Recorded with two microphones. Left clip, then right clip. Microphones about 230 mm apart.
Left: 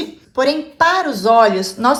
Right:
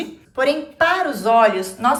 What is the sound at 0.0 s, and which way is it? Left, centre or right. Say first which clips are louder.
Speech: left 3 dB; centre.